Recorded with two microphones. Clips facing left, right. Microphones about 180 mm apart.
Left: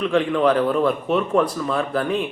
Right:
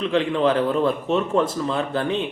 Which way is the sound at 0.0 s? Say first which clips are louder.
Left 2 dB; 30° right (ahead or behind).